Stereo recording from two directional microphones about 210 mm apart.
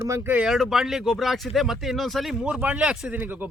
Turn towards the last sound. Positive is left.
turn(degrees=-5)  # may be behind; listen again after turning